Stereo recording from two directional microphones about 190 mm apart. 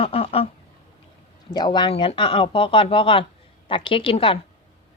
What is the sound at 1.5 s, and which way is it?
Speech, 25° left (ahead or behind).